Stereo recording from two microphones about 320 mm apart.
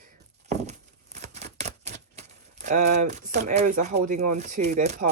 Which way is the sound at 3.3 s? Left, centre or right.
Right.